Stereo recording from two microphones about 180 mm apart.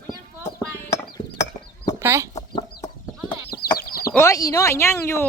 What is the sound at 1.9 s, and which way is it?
Chicken, 15° right (ahead or behind).